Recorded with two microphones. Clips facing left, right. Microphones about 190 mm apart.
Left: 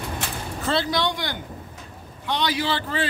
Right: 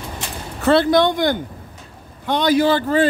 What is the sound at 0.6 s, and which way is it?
Speech, 60° right (ahead or behind).